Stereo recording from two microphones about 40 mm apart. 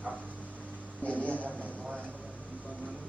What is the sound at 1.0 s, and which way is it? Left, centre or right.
Speech, left.